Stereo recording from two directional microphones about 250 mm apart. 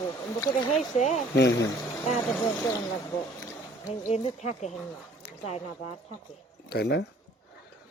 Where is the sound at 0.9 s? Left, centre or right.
Left.